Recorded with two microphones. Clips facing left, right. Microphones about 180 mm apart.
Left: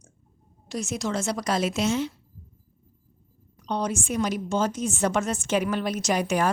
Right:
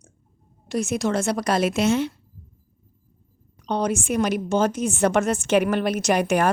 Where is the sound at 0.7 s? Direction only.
60° right (ahead or behind).